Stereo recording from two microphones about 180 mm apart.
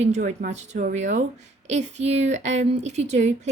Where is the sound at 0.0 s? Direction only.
40° right (ahead or behind).